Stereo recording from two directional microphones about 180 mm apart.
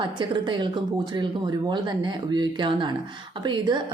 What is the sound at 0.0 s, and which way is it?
Speech, 25° right (ahead or behind).